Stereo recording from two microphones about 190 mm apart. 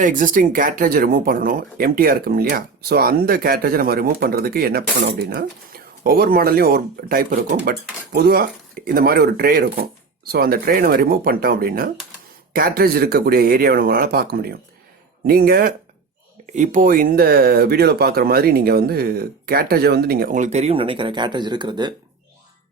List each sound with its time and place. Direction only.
0.0 s speech: 45° right (ahead or behind)
16.5 s speech: 40° right (ahead or behind); by 21.9 s 25° right (ahead or behind)